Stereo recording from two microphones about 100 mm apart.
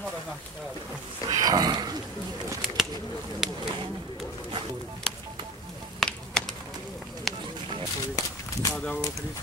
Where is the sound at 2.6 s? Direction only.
5° right (ahead or behind).